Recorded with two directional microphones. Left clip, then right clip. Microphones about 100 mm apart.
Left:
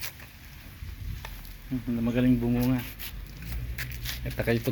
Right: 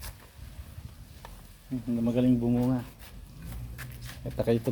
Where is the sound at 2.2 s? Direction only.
25° right (ahead or behind).